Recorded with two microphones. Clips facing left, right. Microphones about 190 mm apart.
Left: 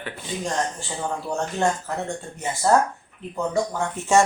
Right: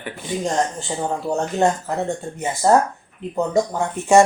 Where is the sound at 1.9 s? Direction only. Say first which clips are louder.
Right 5 dB; 20° right (ahead or behind).